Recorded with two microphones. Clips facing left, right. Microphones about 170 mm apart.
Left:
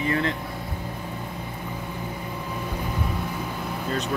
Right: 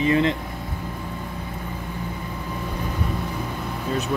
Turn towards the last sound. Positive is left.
turn(degrees=-10)  # may be behind; listen again after turning